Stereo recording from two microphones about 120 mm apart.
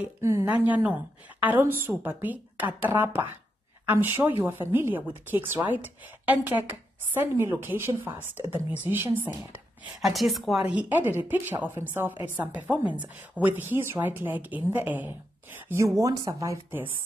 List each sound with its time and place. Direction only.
0.2 s speech: 25° right (ahead or behind)
0.5 s a woman's voice: 15° right (ahead or behind)
10.0 s a woman's voice: centre (ahead or behind); by 16.5 s 30° right (ahead or behind)